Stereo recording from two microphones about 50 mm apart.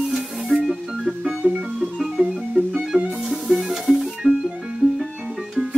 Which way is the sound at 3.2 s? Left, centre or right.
Centre.